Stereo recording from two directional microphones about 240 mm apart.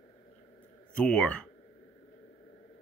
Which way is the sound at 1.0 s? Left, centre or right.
Centre.